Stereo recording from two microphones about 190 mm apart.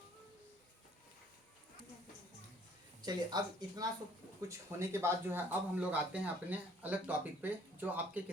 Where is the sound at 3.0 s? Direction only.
20° right (ahead or behind).